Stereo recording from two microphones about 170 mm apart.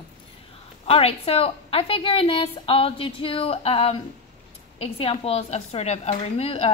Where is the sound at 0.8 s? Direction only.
35° left (ahead or behind).